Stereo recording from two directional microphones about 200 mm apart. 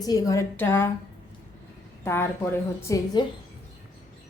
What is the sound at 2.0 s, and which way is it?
A woman's voice, 10° left (ahead or behind).